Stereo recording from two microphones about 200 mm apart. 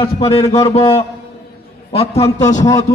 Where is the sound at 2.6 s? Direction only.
15° left (ahead or behind).